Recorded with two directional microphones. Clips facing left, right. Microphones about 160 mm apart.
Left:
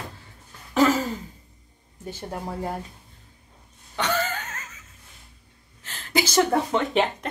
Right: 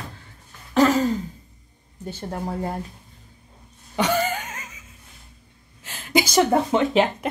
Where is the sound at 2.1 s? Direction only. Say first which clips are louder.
Right 2 dB; 10° left (ahead or behind).